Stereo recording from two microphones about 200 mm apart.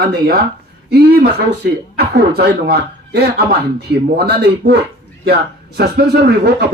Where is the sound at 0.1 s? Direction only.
50° right (ahead or behind).